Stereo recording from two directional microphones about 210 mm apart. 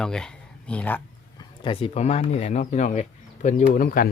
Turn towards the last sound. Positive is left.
turn(degrees=45)  # may be behind; listen again after turning